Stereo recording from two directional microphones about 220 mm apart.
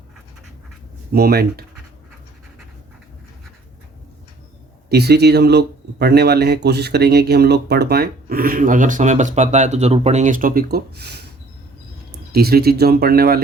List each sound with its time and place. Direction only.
1.1 s speech: 45° right (ahead or behind)
4.9 s speech: 45° right (ahead or behind)
12.3 s speech: 45° right (ahead or behind)